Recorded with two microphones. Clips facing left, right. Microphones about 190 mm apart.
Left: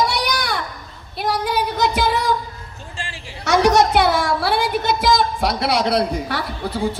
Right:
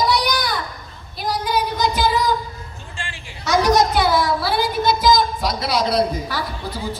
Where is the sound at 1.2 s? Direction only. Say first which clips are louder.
Left 1 dB; 65° left (ahead or behind).